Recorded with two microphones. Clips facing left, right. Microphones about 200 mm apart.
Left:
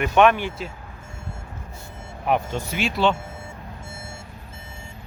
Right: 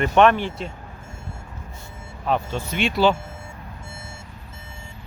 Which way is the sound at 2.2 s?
15° left (ahead or behind).